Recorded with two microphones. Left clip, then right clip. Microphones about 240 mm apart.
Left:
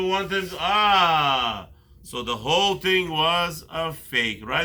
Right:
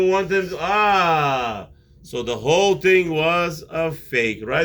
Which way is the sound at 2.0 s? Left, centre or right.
Left.